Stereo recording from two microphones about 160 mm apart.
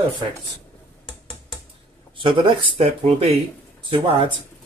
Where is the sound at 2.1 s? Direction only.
30° right (ahead or behind).